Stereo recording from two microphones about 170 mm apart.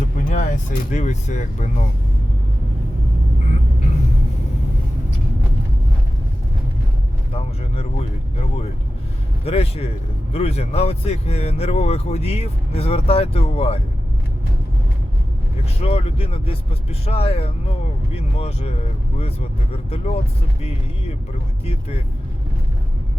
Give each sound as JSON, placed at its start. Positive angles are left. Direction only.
{"t": 0.3, "sound": "speech", "side_deg": 50}
{"t": 7.3, "sound": "speech", "side_deg": 35}
{"t": 9.4, "sound": "speech", "side_deg": 35}
{"t": 15.8, "sound": "speech", "side_deg": 35}
{"t": 19.7, "sound": "speech", "side_deg": 35}
{"t": 21.6, "sound": "speech", "side_deg": 35}